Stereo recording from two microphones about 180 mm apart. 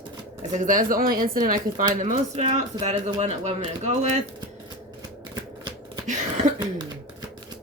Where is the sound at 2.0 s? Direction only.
40° right (ahead or behind).